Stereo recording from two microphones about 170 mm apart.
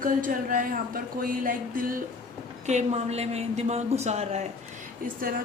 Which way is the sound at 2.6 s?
40° right (ahead or behind).